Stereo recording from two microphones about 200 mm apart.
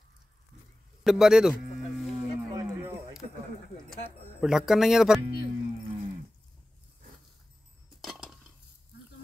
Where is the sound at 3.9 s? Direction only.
5° right (ahead or behind).